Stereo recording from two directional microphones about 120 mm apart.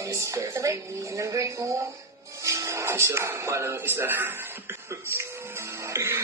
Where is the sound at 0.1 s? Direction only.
25° right (ahead or behind).